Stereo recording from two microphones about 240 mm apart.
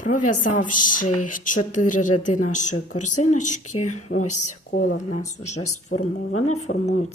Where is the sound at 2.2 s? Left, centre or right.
Left.